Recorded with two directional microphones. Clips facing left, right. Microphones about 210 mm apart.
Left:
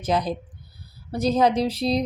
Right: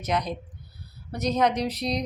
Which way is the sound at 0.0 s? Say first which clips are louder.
Left 4 dB; 30° left (ahead or behind).